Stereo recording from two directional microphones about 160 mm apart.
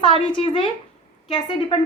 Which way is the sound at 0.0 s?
35° left (ahead or behind).